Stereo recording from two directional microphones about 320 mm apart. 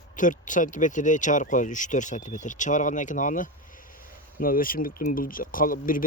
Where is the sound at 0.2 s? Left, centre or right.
Left.